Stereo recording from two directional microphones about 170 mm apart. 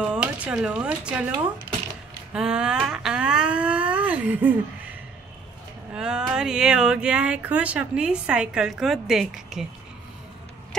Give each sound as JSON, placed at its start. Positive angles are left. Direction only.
{"t": 0.0, "sound": "speech", "side_deg": -5}
{"t": 2.3, "sound": "speech", "side_deg": -5}
{"t": 5.9, "sound": "speech", "side_deg": -5}